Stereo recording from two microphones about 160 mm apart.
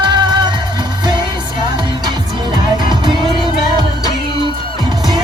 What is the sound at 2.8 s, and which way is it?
Music, 30° right (ahead or behind).